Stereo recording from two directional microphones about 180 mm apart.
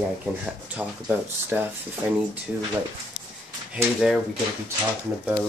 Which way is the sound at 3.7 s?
Centre (ahead or behind).